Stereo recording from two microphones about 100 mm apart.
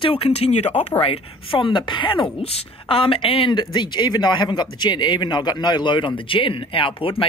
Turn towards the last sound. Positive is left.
turn(degrees=60)  # may be behind; listen again after turning